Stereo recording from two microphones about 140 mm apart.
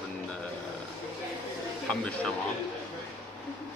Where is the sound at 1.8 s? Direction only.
5° left (ahead or behind).